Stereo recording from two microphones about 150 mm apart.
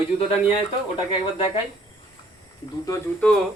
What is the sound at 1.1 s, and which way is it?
Speech, 35° left (ahead or behind).